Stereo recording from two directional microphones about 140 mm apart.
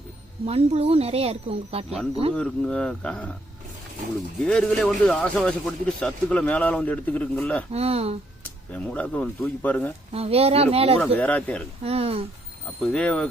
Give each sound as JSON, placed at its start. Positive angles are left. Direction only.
{"t": 0.4, "sound": "speech", "side_deg": -45}
{"t": 2.3, "sound": "a man's voice", "side_deg": 5}
{"t": 4.4, "sound": "a man's voice", "side_deg": 5}
{"t": 7.7, "sound": "speech", "side_deg": -45}
{"t": 8.7, "sound": "a man's voice", "side_deg": 10}
{"t": 10.1, "sound": "speech", "side_deg": -45}
{"t": 11.2, "sound": "a man's voice", "side_deg": 10}
{"t": 11.8, "sound": "speech", "side_deg": -45}
{"t": 12.8, "sound": "a man's voice", "side_deg": 10}